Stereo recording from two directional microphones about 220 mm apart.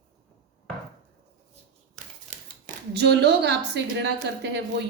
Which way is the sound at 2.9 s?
50° right (ahead or behind).